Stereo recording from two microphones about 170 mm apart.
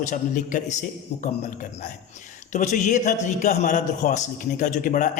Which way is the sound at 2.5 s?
45° left (ahead or behind).